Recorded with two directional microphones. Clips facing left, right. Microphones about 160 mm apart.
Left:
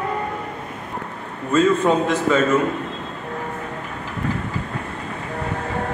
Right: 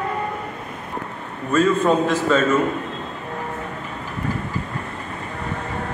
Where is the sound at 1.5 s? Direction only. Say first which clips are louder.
Left 1 dB; 20° left (ahead or behind).